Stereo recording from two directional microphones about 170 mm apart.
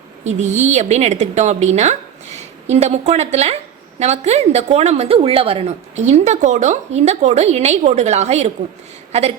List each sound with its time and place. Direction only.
0.3 s a woman's voice: 45° right (ahead or behind)